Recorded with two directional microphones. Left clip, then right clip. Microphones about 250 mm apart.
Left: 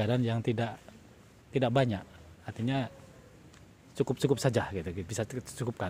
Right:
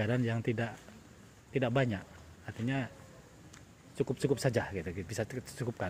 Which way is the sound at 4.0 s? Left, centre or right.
Centre.